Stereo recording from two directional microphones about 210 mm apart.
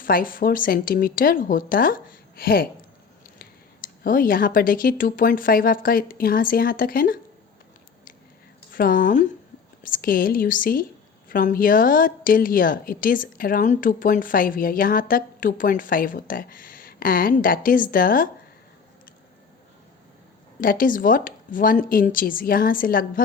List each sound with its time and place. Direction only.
0.0 s speech: 40° left (ahead or behind)
4.0 s speech: 40° left (ahead or behind)
8.7 s a woman's voice: 40° left (ahead or behind)
20.6 s a woman's voice: 40° left (ahead or behind)